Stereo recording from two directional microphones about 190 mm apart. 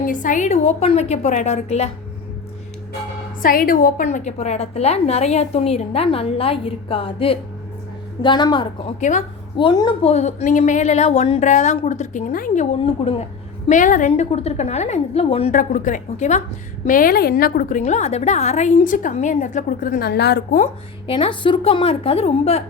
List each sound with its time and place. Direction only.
0.0 s a woman's voice: 45° left (ahead or behind)
3.4 s a woman's voice: 50° left (ahead or behind); by 8.6 s 25° left (ahead or behind)
9.0 s a woman's voice: 40° left (ahead or behind)
9.6 s a woman's voice: 25° left (ahead or behind); by 12.6 s 45° left (ahead or behind)
12.8 s a woman's voice: 30° left (ahead or behind)
13.7 s a woman's voice: 40° left (ahead or behind)
15.5 s a woman's voice: 45° left (ahead or behind)
21.1 s a woman's voice: 25° left (ahead or behind)